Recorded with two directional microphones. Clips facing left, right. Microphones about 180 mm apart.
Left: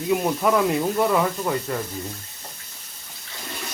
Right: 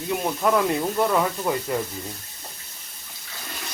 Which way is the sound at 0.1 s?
5° left (ahead or behind).